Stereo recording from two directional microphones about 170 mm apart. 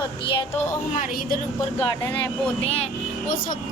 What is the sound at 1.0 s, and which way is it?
Speech, 55° left (ahead or behind).